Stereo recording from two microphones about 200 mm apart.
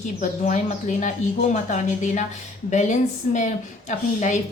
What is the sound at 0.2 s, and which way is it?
A woman's voice, 35° left (ahead or behind).